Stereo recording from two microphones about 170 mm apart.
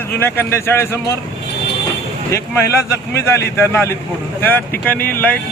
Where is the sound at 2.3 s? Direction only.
15° left (ahead or behind).